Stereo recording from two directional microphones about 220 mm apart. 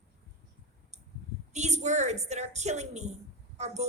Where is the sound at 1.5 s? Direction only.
30° right (ahead or behind).